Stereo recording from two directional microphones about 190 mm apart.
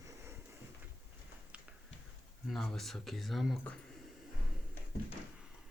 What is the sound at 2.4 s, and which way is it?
Speech, centre (ahead or behind).